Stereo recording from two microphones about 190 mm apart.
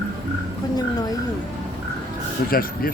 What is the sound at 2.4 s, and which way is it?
Speech, 50° left (ahead or behind).